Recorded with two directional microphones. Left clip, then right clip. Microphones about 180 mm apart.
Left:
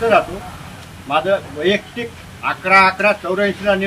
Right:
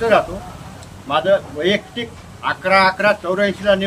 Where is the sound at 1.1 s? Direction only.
35° right (ahead or behind).